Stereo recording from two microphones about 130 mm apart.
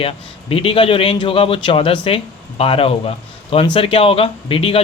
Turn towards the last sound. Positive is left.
turn(degrees=45)  # may be behind; listen again after turning